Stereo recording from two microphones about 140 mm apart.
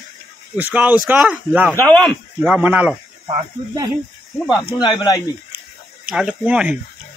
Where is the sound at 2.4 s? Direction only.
10° right (ahead or behind).